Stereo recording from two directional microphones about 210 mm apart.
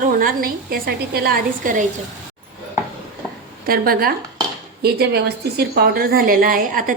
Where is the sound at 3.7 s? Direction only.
45° right (ahead or behind).